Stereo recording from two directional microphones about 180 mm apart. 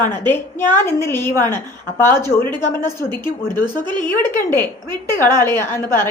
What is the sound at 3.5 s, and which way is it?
Speech, 25° right (ahead or behind).